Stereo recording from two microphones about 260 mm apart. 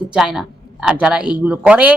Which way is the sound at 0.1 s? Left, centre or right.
Centre.